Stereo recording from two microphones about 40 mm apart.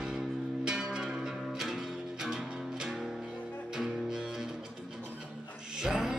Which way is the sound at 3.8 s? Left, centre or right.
Centre.